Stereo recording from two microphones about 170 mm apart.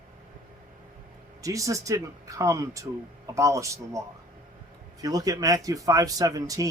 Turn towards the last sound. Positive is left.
turn(degrees=-20)  # may be behind; listen again after turning